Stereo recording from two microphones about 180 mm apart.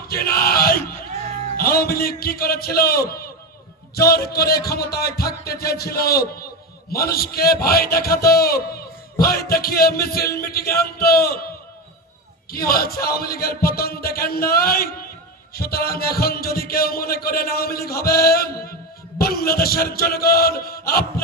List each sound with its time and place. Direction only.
0.1 s music: 55° left (ahead or behind)
1.5 s a man's voice: 55° left (ahead or behind)
12.5 s a man's voice: 55° left (ahead or behind)